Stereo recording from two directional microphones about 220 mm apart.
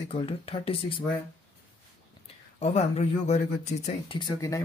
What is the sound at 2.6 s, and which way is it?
Speech, 30° left (ahead or behind).